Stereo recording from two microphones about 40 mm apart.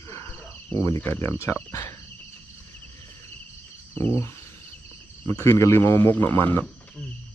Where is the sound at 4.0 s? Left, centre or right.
Left.